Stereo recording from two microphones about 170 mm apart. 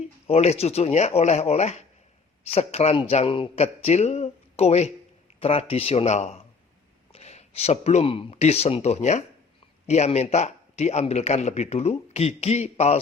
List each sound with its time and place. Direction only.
0.3 s a man's voice: 35° left (ahead or behind)